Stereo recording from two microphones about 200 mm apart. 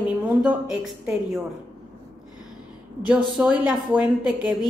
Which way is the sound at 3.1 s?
5° right (ahead or behind).